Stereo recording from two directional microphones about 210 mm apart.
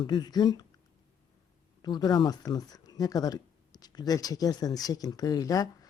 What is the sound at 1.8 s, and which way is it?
Speech, 20° left (ahead or behind).